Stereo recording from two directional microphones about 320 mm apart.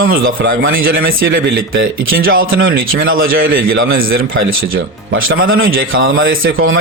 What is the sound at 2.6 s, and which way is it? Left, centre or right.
A man's voice, right.